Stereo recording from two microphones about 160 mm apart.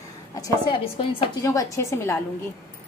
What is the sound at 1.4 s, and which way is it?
Speech, 20° left (ahead or behind).